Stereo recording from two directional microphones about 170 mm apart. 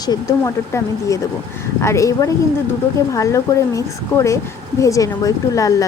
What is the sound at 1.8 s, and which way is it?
A woman's voice, 20° left (ahead or behind).